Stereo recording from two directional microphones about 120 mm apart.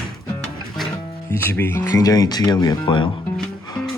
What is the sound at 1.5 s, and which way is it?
Speech, 15° left (ahead or behind).